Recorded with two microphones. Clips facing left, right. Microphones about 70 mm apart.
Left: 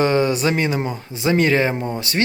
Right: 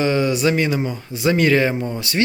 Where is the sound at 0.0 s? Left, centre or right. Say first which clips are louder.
Left 1 dB; left.